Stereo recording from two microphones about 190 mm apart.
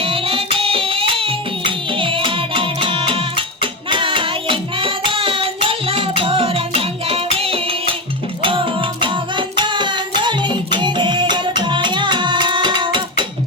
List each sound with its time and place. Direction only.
0.0 s music: 30° right (ahead or behind)